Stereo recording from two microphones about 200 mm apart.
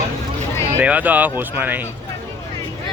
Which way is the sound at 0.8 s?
5° right (ahead or behind).